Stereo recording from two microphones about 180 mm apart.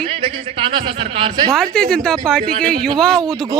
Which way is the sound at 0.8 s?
30° right (ahead or behind).